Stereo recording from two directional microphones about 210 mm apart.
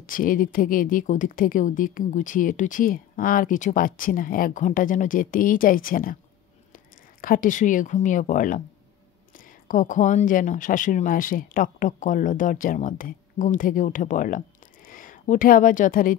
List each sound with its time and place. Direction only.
0.0 s speech: 40° left (ahead or behind)
7.2 s speech: 40° left (ahead or behind)
9.7 s speech: 40° left (ahead or behind)